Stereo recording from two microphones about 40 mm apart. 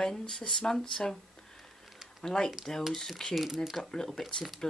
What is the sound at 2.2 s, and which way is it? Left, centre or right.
Speech, centre.